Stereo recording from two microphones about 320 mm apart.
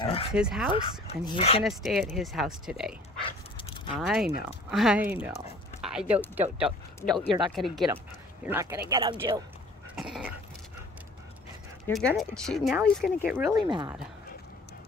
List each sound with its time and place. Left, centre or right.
0.0 s speech: centre
0.3 s speech: centre
0.7 s speech: centre
1.6 s speech: centre
3.2 s dog: centre
4.0 s speech: centre
9.9 s cough: centre
11.9 s speech: centre